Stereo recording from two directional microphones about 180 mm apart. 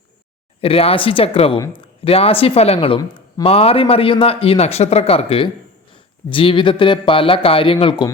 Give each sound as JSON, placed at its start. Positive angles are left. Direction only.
{"t": 0.6, "sound": "speech", "side_deg": 30}
{"t": 3.0, "sound": "a sound", "side_deg": 20}
{"t": 3.4, "sound": "speech", "side_deg": 35}